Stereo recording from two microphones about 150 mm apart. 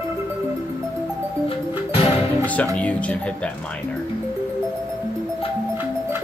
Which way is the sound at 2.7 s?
10° left (ahead or behind).